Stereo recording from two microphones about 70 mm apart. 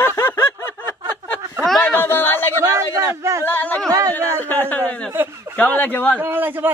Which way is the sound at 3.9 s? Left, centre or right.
Right.